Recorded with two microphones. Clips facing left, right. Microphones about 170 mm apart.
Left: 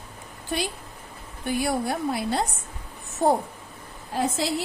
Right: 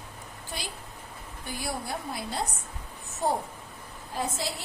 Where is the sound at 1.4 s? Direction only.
65° left (ahead or behind).